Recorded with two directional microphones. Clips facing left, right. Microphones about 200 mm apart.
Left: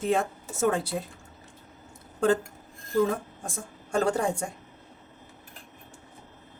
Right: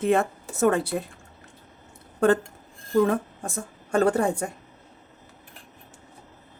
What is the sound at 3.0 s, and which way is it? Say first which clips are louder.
A woman's voice: right 4 dB; 60° right (ahead or behind).